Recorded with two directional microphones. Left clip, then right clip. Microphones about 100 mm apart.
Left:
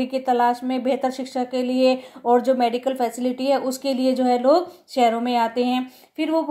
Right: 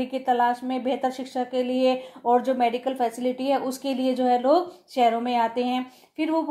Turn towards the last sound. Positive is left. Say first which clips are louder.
# left 3 dB
turn(degrees=40)  # may be behind; listen again after turning